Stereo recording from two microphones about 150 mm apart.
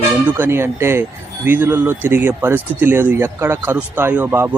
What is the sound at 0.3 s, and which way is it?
Speech, 15° right (ahead or behind).